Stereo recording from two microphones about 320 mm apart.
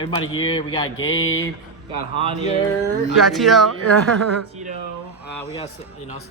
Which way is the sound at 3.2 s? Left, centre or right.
Centre.